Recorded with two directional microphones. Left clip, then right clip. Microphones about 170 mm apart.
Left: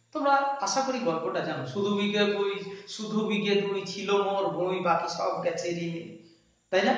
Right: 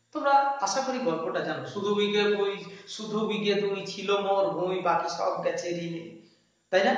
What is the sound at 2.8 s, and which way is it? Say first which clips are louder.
A man's voice: right 1 dB; 5° right (ahead or behind).